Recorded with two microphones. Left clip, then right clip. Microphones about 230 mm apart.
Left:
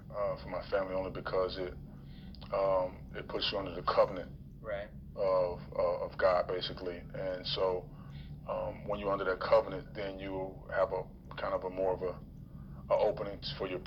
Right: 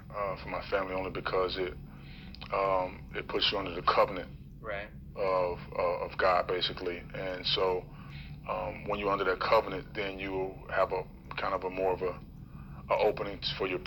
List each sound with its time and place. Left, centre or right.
0.1 s a man's voice: right